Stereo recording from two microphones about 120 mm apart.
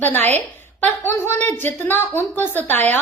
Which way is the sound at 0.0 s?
15° left (ahead or behind).